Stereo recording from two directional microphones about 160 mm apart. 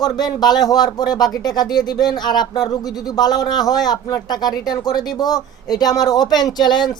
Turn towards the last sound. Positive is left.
turn(degrees=25)  # may be behind; listen again after turning